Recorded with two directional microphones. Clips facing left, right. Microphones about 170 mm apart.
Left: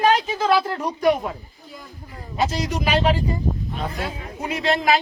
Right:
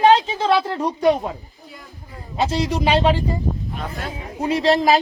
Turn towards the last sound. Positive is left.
turn(degrees=-35)  # may be behind; listen again after turning